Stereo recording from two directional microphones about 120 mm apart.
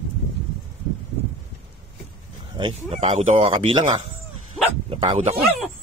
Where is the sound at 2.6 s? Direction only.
60° right (ahead or behind).